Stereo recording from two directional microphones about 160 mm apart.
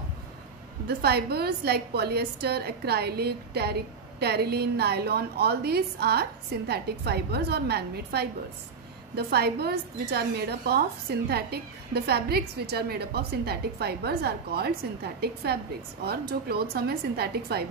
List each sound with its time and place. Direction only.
0.8 s a woman's voice: 85° right